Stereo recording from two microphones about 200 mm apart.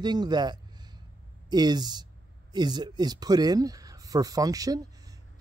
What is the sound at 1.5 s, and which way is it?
Speech, 20° right (ahead or behind).